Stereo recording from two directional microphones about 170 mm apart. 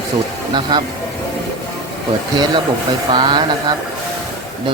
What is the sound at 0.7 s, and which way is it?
Speech, 25° right (ahead or behind).